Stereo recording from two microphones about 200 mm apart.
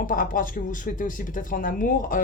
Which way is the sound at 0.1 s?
45° left (ahead or behind).